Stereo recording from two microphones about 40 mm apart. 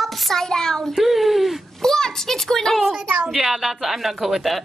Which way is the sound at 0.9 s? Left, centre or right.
Centre.